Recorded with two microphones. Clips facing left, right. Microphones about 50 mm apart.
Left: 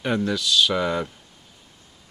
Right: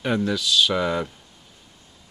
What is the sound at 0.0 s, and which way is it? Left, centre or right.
Speech, centre.